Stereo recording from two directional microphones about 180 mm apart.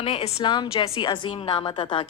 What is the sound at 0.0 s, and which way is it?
A woman's voice, 35° left (ahead or behind).